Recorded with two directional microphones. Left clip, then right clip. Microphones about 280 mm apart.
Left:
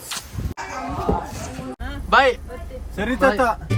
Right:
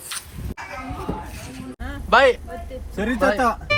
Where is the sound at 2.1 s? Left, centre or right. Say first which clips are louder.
Right 1 dB; centre.